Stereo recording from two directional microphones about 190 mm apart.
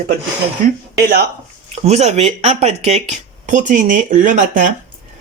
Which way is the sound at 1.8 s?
35° right (ahead or behind).